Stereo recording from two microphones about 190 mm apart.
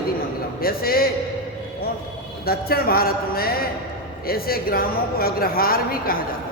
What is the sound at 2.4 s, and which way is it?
A woman's voice, 55° left (ahead or behind).